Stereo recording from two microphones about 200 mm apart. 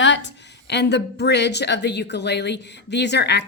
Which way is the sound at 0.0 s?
65° left (ahead or behind).